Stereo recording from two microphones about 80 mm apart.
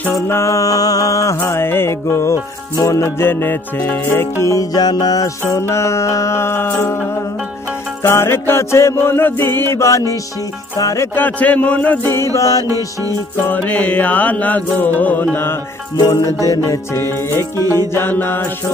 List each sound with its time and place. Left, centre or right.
0.3 s music: left
1.5 s music: left
4.7 s music: left
5.5 s music: left
11.1 s music: left
12.4 s music: left
12.6 s music: right
13.5 s music: centre
16.0 s music: left
16.9 s music: left